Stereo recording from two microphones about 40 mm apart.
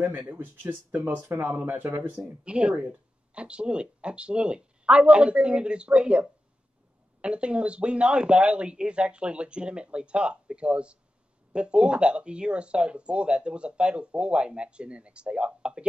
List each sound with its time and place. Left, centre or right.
0.3 s speech: right
2.1 s speech: right